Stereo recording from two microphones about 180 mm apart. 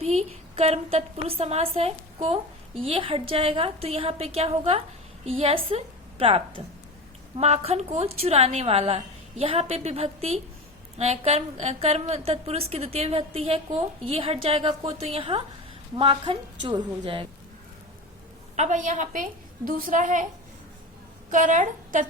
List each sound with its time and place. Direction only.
0.0 s a woman's voice: 35° right (ahead or behind)
18.5 s a woman's voice: 40° right (ahead or behind)
21.2 s a woman's voice: 45° right (ahead or behind)